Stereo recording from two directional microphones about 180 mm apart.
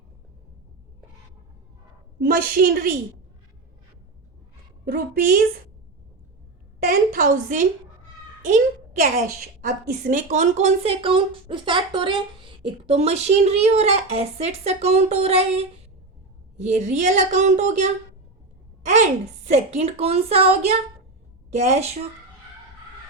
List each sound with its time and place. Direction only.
2.1 s a woman's voice: 55° right (ahead or behind)
4.9 s a woman's voice: 55° right (ahead or behind)
6.8 s a woman's voice: 50° right (ahead or behind); by 22.0 s 35° right (ahead or behind)